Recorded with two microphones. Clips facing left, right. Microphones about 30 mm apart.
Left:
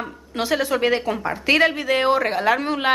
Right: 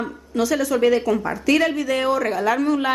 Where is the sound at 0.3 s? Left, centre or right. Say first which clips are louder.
Right 1 dB; left.